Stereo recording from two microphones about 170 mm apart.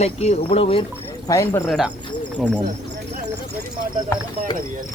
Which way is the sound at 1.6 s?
Centre (ahead or behind).